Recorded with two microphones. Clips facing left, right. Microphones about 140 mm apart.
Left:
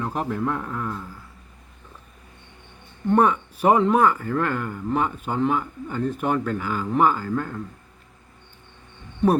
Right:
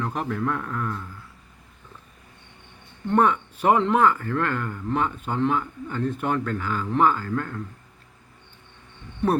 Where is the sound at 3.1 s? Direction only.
10° left (ahead or behind).